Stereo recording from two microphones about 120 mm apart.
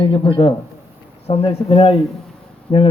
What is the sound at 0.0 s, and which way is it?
Speech, 45° left (ahead or behind).